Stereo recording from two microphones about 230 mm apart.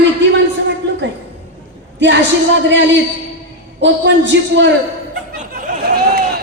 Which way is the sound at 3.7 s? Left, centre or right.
Right.